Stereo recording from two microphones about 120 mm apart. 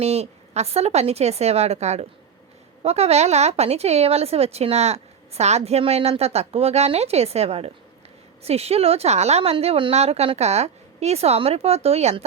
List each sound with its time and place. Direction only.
0.0 s a woman's voice: 60° right (ahead or behind)